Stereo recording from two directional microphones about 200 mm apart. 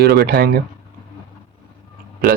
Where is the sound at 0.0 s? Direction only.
55° right (ahead or behind).